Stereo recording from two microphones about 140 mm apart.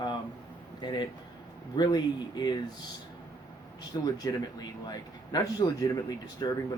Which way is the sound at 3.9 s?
30° left (ahead or behind).